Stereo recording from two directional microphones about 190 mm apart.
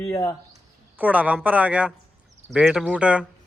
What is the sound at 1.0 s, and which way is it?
A woman's voice, 5° right (ahead or behind).